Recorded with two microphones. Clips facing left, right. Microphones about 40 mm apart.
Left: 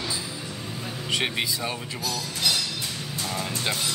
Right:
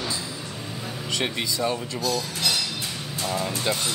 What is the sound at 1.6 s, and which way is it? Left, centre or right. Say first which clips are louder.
Speech: right 5 dB; centre.